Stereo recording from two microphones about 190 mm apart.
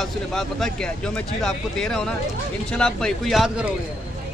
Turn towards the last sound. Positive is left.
turn(degrees=0)  # may be behind; listen again after turning